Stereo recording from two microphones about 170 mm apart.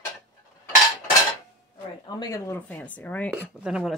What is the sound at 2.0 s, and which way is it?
Speech, 20° left (ahead or behind).